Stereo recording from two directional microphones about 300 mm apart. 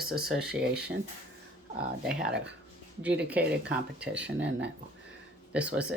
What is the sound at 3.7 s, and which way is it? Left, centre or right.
Speech, centre.